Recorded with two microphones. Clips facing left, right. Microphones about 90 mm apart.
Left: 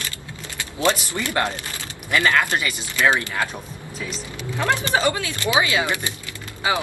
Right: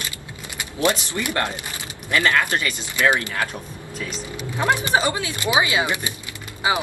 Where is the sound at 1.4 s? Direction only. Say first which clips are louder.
Left 1 dB; 15° left (ahead or behind).